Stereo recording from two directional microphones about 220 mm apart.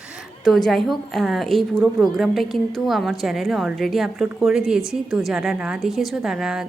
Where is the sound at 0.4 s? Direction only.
Centre (ahead or behind).